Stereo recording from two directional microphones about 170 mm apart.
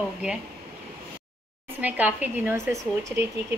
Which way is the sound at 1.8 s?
10° right (ahead or behind).